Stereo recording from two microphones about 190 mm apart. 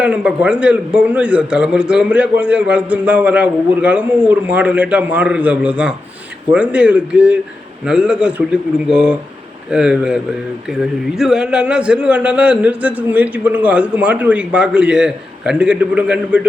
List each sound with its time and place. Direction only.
0.0 s a man's voice: 5° right (ahead or behind)
11.2 s a man's voice: 5° right (ahead or behind)